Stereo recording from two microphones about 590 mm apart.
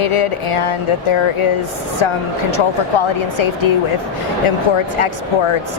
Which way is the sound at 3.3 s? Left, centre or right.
Left.